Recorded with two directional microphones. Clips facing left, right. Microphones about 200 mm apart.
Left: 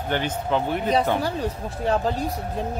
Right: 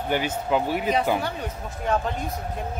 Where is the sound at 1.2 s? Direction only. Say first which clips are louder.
Left 4 dB; 35° left (ahead or behind).